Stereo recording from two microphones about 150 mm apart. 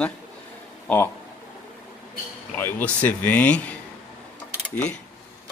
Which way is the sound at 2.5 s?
15° left (ahead or behind).